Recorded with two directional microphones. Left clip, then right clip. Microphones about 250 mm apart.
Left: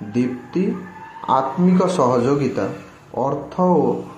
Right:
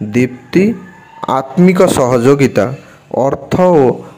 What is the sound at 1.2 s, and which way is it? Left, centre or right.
Speech, right.